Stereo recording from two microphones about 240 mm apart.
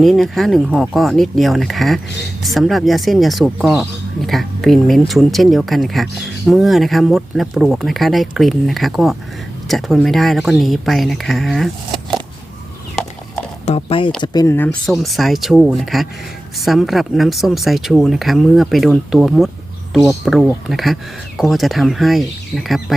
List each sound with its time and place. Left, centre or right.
0.0 s speech: centre
13.7 s speech: left; by 23.0 s centre